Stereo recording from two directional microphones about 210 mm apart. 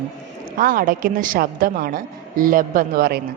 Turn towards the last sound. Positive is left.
turn(degrees=-45)  # may be behind; listen again after turning